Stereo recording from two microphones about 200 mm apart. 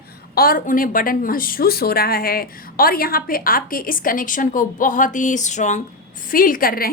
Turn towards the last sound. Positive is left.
turn(degrees=45)  # may be behind; listen again after turning